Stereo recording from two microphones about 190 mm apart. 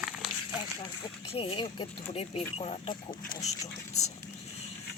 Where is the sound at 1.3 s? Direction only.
30° left (ahead or behind).